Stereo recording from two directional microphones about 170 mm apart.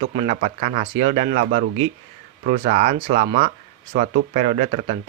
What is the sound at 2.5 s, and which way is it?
Speech, 50° right (ahead or behind).